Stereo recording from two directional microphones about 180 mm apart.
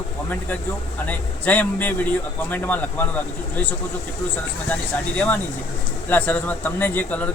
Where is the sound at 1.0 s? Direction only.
10° left (ahead or behind).